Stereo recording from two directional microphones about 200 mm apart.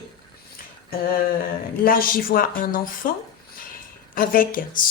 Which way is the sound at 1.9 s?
45° left (ahead or behind).